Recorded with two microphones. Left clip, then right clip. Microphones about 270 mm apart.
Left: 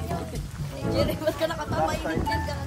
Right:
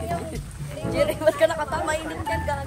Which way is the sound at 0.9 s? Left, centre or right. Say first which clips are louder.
Right 6 dB; right.